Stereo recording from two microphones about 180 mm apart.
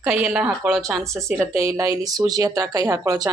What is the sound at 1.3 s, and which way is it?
Speech, 15° right (ahead or behind).